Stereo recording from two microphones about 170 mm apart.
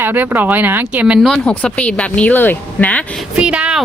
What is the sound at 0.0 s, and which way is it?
Speech, 10° right (ahead or behind).